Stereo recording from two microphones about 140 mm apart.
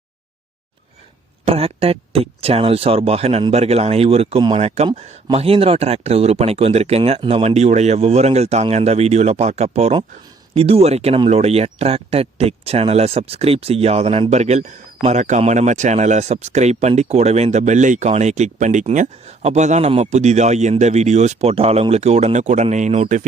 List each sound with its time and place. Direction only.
1.5 s speech: 45° right (ahead or behind)